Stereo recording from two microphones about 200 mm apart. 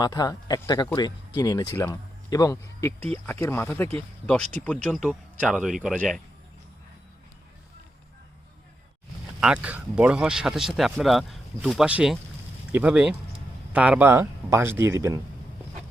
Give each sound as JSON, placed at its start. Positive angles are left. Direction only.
{"t": 0.0, "sound": "speech", "side_deg": 20}
{"t": 9.4, "sound": "speech", "side_deg": -5}